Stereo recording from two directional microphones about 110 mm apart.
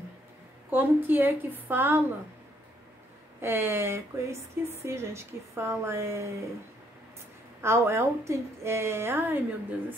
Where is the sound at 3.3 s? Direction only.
20° right (ahead or behind).